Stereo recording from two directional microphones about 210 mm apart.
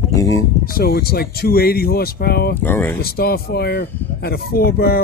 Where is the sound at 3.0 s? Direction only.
50° left (ahead or behind).